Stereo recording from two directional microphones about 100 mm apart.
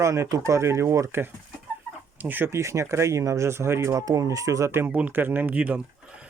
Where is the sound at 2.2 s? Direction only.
20° right (ahead or behind).